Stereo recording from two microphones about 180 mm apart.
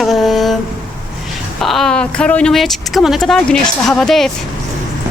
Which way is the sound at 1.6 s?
Centre (ahead or behind).